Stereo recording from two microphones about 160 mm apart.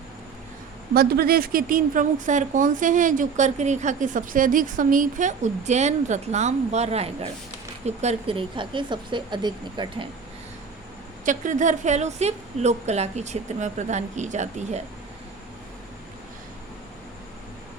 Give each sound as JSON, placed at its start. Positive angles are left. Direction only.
{"t": 0.9, "sound": "a woman's voice", "side_deg": -70}
{"t": 11.3, "sound": "a woman's voice", "side_deg": -50}